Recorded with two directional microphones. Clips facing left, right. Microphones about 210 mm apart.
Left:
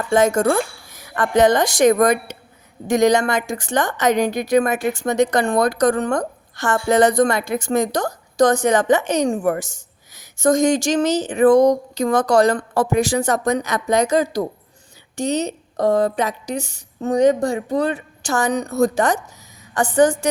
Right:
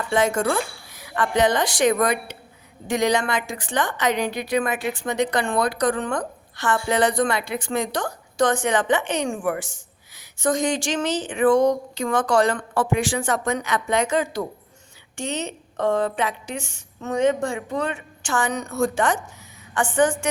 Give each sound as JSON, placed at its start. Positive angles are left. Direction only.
{"t": 0.1, "sound": "a woman's voice", "side_deg": 45}